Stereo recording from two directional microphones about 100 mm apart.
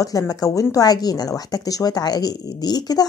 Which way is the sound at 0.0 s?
35° left (ahead or behind).